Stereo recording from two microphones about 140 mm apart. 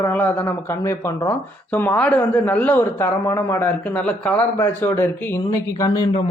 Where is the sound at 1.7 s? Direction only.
10° left (ahead or behind).